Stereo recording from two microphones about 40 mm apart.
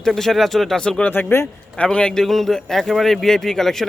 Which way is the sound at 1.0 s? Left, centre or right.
Left.